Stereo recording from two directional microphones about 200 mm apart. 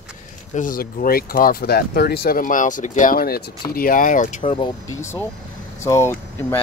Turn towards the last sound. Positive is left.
turn(degrees=15)  # may be behind; listen again after turning